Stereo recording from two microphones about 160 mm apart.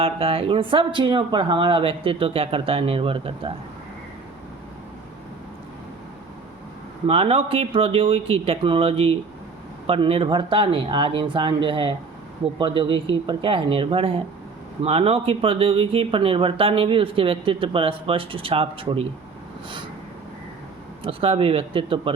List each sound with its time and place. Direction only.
0.0 s speech: 35° right (ahead or behind)
7.1 s speech: 35° right (ahead or behind)
21.0 s speech: 35° right (ahead or behind)